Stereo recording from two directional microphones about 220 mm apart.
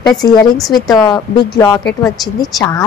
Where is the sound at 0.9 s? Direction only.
15° left (ahead or behind).